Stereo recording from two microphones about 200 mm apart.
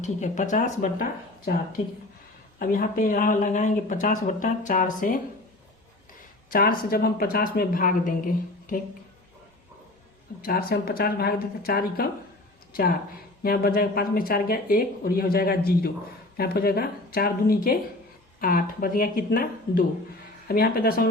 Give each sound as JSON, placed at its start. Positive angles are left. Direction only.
{"t": 0.0, "sound": "speech", "side_deg": 40}
{"t": 2.6, "sound": "speech", "side_deg": 45}
{"t": 6.5, "sound": "speech", "side_deg": 45}
{"t": 10.4, "sound": "speech", "side_deg": 50}